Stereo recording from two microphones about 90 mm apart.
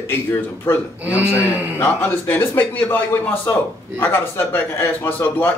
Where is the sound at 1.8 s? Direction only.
20° left (ahead or behind).